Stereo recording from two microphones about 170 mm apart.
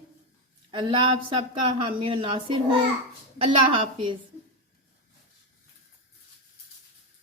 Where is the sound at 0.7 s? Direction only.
30° right (ahead or behind).